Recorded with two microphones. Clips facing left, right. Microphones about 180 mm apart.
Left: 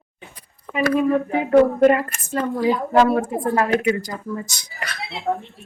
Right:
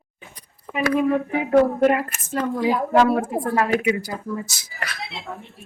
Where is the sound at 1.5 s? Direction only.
5° right (ahead or behind).